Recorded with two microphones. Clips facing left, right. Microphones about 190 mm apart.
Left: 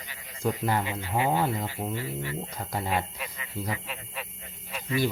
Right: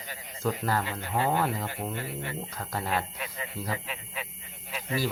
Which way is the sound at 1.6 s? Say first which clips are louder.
Left 2 dB; 55° right (ahead or behind).